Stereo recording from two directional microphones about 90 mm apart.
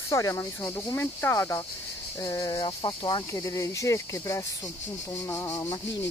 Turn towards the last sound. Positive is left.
turn(degrees=40)  # may be behind; listen again after turning